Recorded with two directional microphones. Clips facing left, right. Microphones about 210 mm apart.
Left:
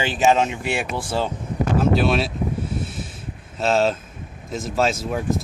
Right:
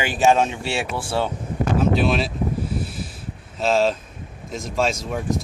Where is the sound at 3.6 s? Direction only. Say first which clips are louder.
Even; centre (ahead or behind).